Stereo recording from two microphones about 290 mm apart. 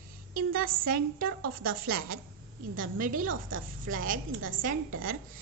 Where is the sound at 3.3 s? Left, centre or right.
Right.